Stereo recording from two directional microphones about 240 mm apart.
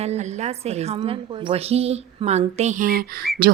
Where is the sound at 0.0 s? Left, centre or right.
Right.